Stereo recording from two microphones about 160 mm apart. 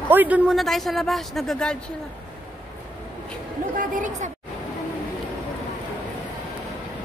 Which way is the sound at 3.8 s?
55° right (ahead or behind).